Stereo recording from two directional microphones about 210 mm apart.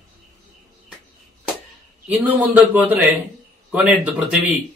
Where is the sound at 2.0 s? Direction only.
10° right (ahead or behind).